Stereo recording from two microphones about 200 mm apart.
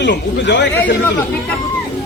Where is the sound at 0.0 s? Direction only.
60° left (ahead or behind).